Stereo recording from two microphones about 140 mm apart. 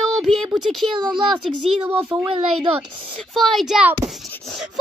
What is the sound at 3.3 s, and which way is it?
Speech, centre (ahead or behind).